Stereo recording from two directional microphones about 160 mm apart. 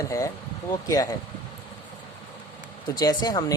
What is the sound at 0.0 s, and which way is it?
Speech, 20° left (ahead or behind).